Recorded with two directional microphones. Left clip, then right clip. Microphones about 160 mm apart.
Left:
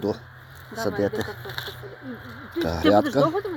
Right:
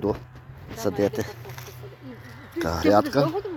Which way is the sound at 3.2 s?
30° right (ahead or behind).